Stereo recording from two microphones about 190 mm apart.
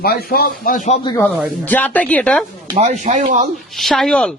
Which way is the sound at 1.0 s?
20° left (ahead or behind).